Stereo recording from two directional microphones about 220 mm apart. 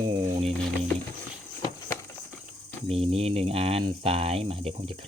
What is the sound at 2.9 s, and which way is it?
Speech, 25° right (ahead or behind).